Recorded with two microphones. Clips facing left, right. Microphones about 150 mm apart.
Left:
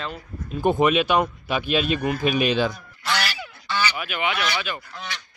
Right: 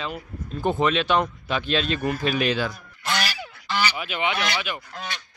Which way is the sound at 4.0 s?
25° right (ahead or behind).